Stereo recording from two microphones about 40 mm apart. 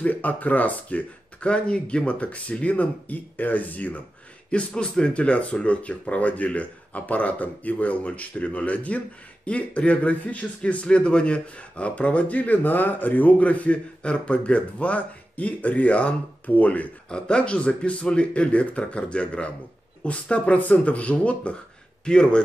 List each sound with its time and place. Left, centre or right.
0.0 s speech: left
1.4 s speech: left
4.5 s speech: left
17.1 s speech: left